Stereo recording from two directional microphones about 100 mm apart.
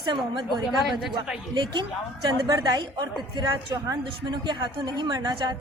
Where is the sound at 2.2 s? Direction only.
40° right (ahead or behind).